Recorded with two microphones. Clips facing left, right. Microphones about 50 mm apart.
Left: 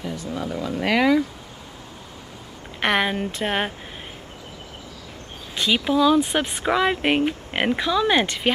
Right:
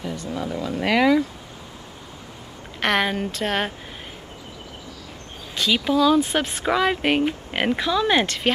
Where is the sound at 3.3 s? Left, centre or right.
Centre.